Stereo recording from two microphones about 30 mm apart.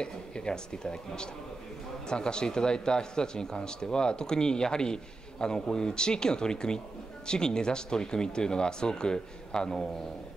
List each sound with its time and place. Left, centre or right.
0.0 s speech: left